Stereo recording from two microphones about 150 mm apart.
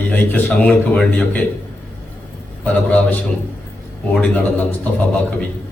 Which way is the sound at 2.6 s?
10° left (ahead or behind).